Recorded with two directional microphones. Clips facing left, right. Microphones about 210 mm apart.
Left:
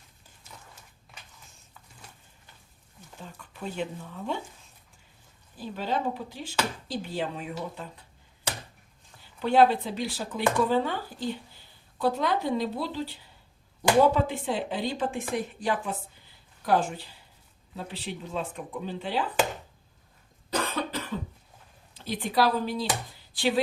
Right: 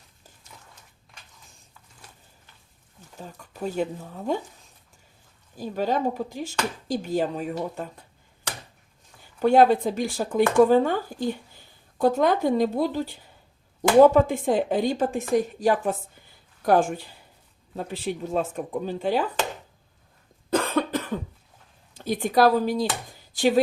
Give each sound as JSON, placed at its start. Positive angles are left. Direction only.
{"t": 3.2, "sound": "speech", "side_deg": -40}
{"t": 5.5, "sound": "speech", "side_deg": -45}
{"t": 9.4, "sound": "speech", "side_deg": -45}
{"t": 20.5, "sound": "cough", "side_deg": -50}
{"t": 21.9, "sound": "speech", "side_deg": -45}